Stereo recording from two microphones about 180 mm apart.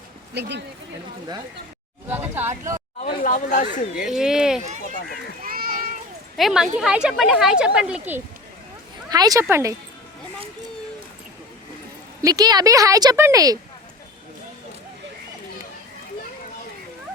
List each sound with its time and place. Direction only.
0.3 s speech: 70° right (ahead or behind)
2.0 s speech: 10° right (ahead or behind)
3.1 s speech: 50° left (ahead or behind)
3.9 s a child's voice: 5° right (ahead or behind)
5.4 s children playing: 55° right (ahead or behind)
6.3 s a child's voice: centre (ahead or behind)
9.0 s a woman's voice: 20° right (ahead or behind)
12.2 s a woman's voice: 20° right (ahead or behind)